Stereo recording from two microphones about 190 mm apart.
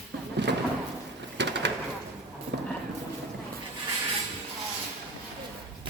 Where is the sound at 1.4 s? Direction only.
65° right (ahead or behind).